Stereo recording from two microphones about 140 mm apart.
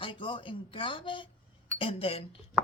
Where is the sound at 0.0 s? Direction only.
35° left (ahead or behind).